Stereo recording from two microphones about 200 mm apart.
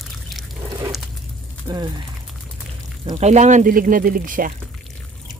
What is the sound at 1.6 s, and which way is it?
Speech, 20° right (ahead or behind).